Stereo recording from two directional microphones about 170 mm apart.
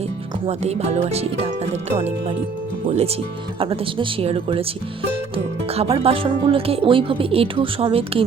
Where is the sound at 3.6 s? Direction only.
30° right (ahead or behind).